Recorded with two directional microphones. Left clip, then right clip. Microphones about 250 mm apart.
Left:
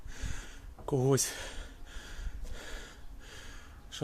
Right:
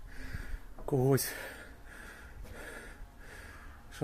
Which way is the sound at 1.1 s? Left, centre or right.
Centre.